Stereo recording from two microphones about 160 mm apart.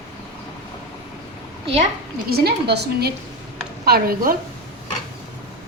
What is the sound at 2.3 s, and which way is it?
Speech, 80° right.